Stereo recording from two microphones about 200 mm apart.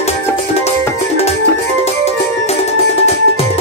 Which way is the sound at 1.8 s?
30° left (ahead or behind).